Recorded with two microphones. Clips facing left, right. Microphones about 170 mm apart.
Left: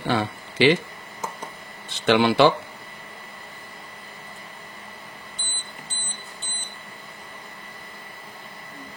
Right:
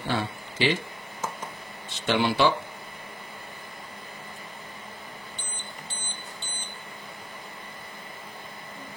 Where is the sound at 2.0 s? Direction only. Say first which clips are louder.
Left 6 dB; 75° left (ahead or behind).